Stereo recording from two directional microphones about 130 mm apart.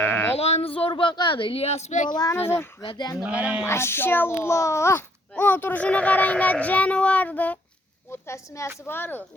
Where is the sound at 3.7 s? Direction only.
20° left (ahead or behind).